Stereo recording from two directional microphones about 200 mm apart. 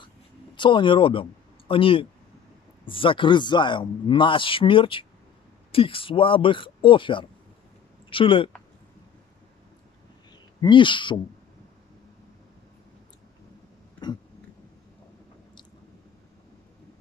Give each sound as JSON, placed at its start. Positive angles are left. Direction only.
{"t": 0.6, "sound": "speech", "side_deg": 25}
{"t": 10.6, "sound": "speech", "side_deg": 25}